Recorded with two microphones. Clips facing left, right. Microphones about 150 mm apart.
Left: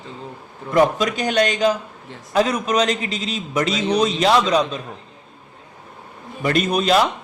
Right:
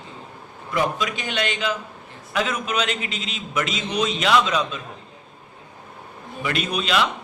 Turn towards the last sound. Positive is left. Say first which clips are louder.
# left 5 dB
turn(degrees=40)  # may be behind; listen again after turning